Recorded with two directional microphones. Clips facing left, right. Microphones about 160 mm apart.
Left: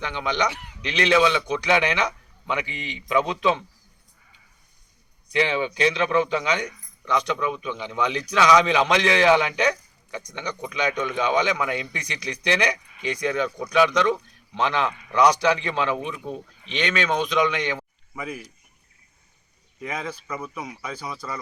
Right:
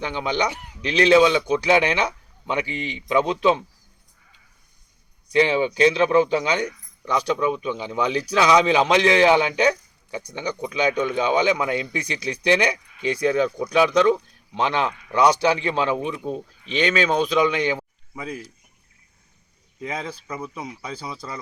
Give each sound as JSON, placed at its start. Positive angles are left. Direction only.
{"t": 0.0, "sound": "a man's voice", "side_deg": -30}
{"t": 5.4, "sound": "a man's voice", "side_deg": -30}
{"t": 19.8, "sound": "a man's voice", "side_deg": -30}